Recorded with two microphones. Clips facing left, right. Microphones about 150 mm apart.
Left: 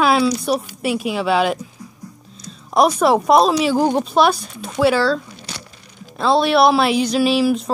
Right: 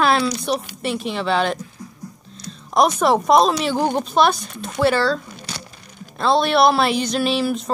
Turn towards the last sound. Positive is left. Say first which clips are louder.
# left 4 dB
turn(degrees=5)  # may be behind; listen again after turning